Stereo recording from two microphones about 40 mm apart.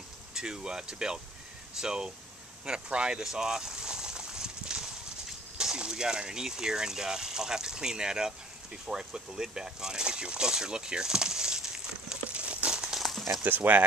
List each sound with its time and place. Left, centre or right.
0.3 s speech: centre
2.6 s a sound: right
5.6 s speech: centre
12.3 s crumpling: right
12.7 s crumpling: centre
13.1 s a sound: centre
13.4 s speech: right